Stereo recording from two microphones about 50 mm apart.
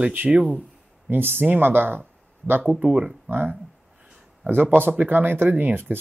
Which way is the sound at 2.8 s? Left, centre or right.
Right.